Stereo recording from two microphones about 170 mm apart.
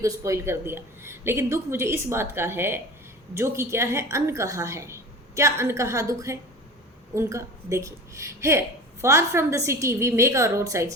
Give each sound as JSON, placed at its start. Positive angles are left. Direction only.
{"t": 0.0, "sound": "a woman's voice", "side_deg": -20}